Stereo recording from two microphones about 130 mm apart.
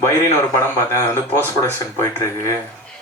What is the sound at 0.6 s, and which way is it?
Speech, 20° left (ahead or behind).